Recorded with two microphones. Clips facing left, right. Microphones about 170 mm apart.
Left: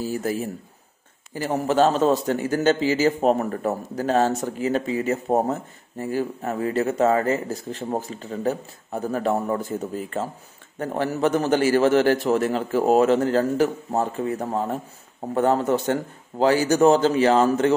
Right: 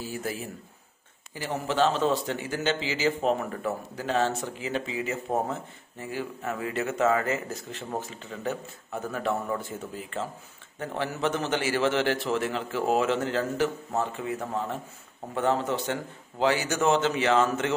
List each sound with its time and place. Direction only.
0.0 s a man's voice: 40° left (ahead or behind)